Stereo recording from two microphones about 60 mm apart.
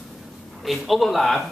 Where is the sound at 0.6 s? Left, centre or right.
Centre.